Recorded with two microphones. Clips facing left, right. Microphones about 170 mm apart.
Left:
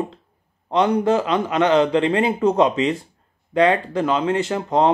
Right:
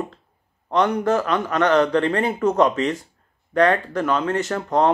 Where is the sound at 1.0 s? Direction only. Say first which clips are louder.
Left 2 dB; 15° left (ahead or behind).